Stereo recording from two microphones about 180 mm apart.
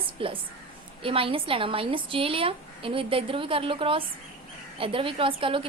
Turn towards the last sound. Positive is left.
turn(degrees=-30)  # may be behind; listen again after turning